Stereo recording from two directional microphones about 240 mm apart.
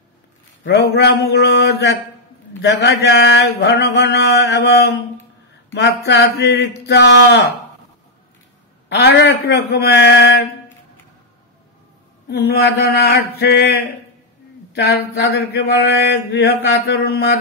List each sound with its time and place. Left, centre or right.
0.7 s mantra: left
8.8 s mantra: left
12.3 s mantra: left
14.8 s mantra: left